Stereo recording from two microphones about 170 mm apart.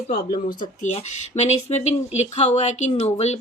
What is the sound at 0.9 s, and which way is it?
Speech, 40° left (ahead or behind).